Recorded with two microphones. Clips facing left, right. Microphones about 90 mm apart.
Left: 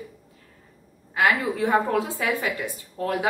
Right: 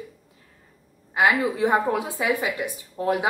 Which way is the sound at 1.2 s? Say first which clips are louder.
Right 2 dB; 20° right (ahead or behind).